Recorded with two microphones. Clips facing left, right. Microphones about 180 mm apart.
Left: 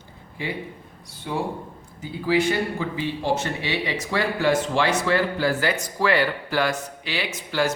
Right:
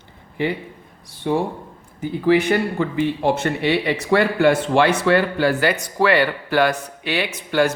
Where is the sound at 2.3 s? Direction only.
60° right (ahead or behind).